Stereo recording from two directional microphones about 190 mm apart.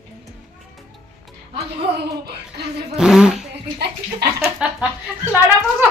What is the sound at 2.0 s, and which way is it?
Speech, 60° right (ahead or behind).